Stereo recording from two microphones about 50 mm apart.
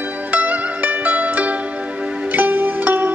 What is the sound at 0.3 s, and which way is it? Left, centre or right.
Music, right.